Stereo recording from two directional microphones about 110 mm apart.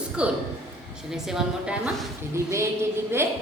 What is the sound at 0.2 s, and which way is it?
A woman's voice, 10° right (ahead or behind).